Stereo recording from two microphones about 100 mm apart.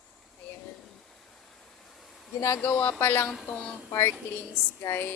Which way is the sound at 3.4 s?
10° left (ahead or behind).